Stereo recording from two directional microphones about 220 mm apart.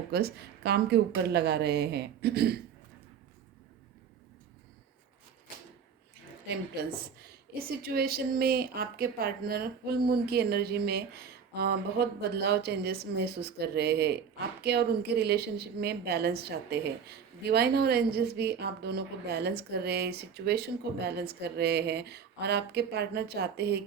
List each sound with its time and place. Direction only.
0.1 s speech: 45° right (ahead or behind)
7.8 s speech: 45° right (ahead or behind)